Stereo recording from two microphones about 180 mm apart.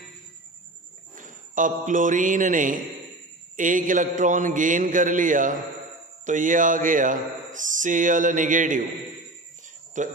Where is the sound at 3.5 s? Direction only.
45° right (ahead or behind).